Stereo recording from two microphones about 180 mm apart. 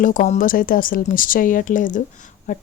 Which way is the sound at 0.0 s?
45° left (ahead or behind).